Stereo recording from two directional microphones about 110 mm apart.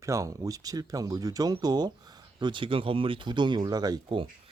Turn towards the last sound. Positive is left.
turn(degrees=-35)  # may be behind; listen again after turning